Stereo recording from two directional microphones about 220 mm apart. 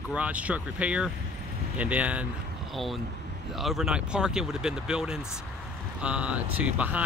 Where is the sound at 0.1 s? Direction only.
5° right (ahead or behind).